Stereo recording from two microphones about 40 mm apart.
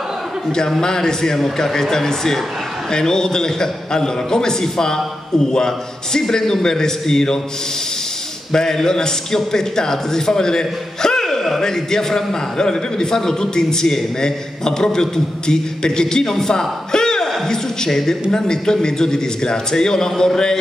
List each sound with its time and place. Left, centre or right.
0.7 s a man's voice: centre
8.5 s a man's voice: centre